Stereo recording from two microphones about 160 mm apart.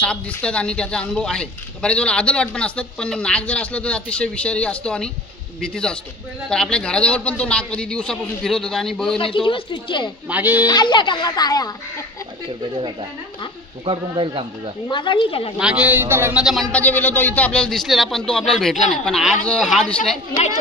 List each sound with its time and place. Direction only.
0.0 s a man's voice: 5° left (ahead or behind)
9.2 s a woman's voice: 35° left (ahead or behind)
10.3 s a man's voice: 10° right (ahead or behind)
10.7 s speech: 30° left (ahead or behind)
13.8 s a man's voice: 30° right (ahead or behind)
14.9 s a woman's voice: 30° left (ahead or behind)
15.5 s a man's voice: 5° right (ahead or behind)
16.4 s a man's voice: centre (ahead or behind)